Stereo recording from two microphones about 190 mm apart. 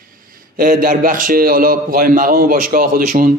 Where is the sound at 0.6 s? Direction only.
50° right (ahead or behind).